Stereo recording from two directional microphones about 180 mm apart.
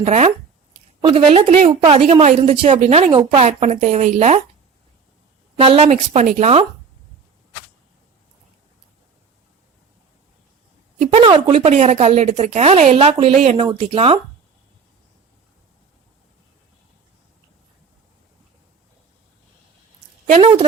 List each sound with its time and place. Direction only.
0.0 s a woman's voice: 35° right (ahead or behind)
5.5 s a woman's voice: 35° right (ahead or behind)
11.0 s a woman's voice: 35° right (ahead or behind)